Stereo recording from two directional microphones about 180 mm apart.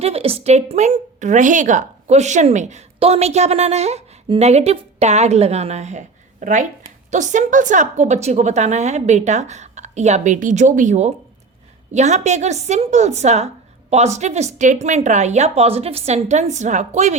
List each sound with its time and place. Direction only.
0.0 s a woman's voice: 35° right (ahead or behind)